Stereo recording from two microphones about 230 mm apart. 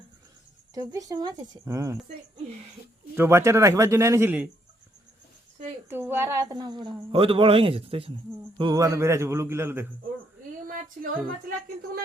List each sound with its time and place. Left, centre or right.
0.7 s speech: centre
3.2 s speech: centre
5.9 s a woman's voice: centre
11.0 s a sound: right